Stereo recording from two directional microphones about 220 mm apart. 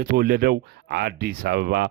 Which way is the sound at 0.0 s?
40° right (ahead or behind).